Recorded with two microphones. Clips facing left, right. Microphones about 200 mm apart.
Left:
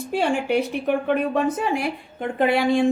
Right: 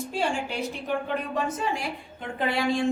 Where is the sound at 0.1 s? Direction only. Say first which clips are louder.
Left 9 dB; 60° left (ahead or behind).